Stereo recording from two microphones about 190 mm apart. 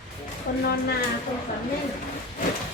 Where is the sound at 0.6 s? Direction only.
55° left (ahead or behind).